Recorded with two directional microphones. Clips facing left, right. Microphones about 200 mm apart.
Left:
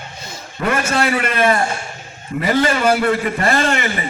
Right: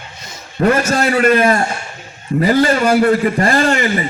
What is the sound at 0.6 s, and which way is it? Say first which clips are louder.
A man's voice: right 5 dB; 40° right (ahead or behind).